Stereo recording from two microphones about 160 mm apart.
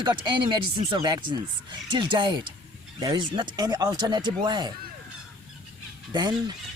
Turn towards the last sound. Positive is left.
turn(degrees=-25)  # may be behind; listen again after turning